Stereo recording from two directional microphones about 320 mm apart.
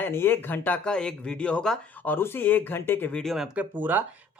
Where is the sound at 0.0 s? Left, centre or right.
Centre.